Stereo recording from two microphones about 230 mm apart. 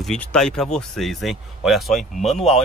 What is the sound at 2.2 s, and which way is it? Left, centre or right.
Speech, left.